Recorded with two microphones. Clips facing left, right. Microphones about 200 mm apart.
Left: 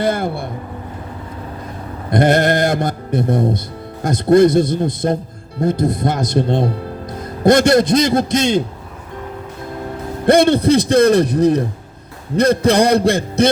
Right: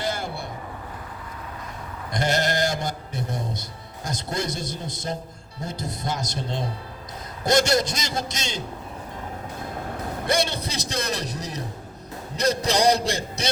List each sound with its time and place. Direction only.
0.0 s speech: 55° left (ahead or behind)
2.0 s a man's voice: 55° left (ahead or behind)
10.2 s speech: 55° left (ahead or behind)